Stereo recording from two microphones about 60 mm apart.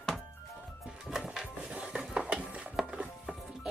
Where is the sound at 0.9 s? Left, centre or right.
Centre.